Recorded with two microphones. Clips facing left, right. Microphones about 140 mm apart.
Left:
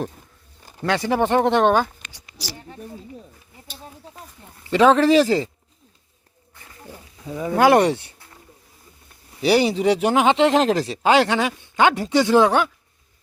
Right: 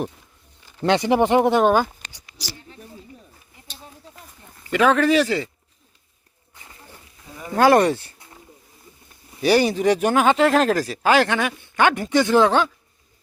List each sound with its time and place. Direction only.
0.8 s speech: 25° right (ahead or behind); by 1.9 s 5° right (ahead or behind)
4.6 s speech: 25° left (ahead or behind)
7.5 s speech: 15° left (ahead or behind)
9.4 s speech: 15° left (ahead or behind)